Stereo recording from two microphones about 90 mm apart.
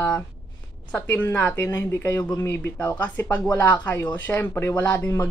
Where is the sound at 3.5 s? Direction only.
35° left (ahead or behind).